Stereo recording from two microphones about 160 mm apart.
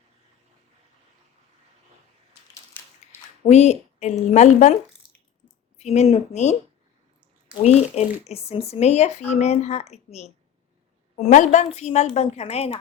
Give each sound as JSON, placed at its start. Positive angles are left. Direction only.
{"t": 2.8, "sound": "a sound", "side_deg": 10}
{"t": 3.4, "sound": "speech", "side_deg": 45}
{"t": 7.6, "sound": "a woman's voice", "side_deg": 45}